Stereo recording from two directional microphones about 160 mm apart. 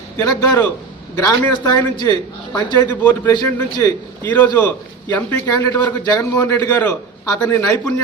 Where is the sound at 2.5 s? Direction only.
25° left (ahead or behind).